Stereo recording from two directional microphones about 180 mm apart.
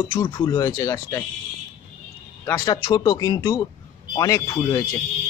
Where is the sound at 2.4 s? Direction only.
20° left (ahead or behind).